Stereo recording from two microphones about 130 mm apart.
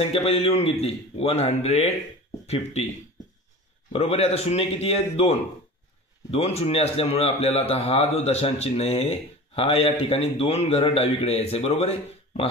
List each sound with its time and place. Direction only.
0.0 s speech: 50° left (ahead or behind)
3.9 s speech: 55° left (ahead or behind)